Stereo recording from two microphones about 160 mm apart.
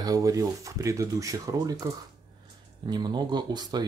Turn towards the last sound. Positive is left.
turn(degrees=-25)  # may be behind; listen again after turning